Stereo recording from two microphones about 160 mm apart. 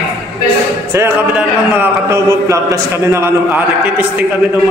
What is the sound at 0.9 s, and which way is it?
A man's voice, 15° right (ahead or behind).